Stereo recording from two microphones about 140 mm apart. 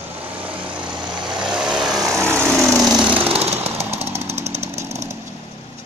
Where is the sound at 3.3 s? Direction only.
45° right (ahead or behind).